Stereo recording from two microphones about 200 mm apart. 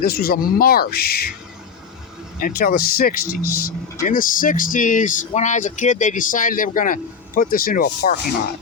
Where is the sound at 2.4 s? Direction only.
45° left (ahead or behind).